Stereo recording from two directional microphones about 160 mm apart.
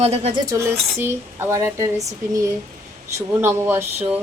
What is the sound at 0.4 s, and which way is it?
Speech, 15° right (ahead or behind).